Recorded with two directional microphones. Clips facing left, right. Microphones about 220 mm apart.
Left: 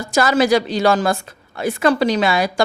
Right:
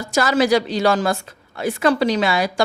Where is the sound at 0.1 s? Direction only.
50° left (ahead or behind).